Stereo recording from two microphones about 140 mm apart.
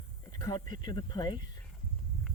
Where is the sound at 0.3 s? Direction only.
30° left (ahead or behind).